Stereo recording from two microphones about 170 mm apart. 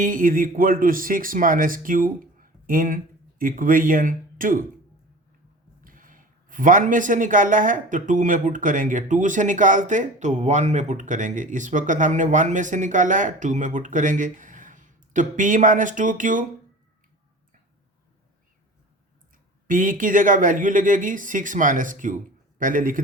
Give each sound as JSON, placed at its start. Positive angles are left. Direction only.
{"t": 0.0, "sound": "speech", "side_deg": -55}
{"t": 5.8, "sound": "speech", "side_deg": -50}
{"t": 19.6, "sound": "speech", "side_deg": -50}